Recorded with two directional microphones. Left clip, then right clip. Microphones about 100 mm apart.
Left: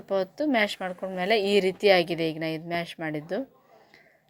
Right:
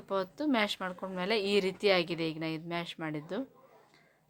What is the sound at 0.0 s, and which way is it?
A woman's voice, 15° left (ahead or behind).